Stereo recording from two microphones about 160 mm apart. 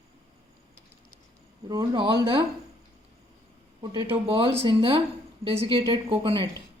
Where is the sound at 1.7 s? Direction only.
25° right (ahead or behind).